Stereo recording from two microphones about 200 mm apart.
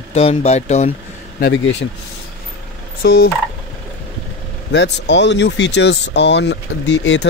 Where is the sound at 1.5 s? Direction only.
65° left (ahead or behind).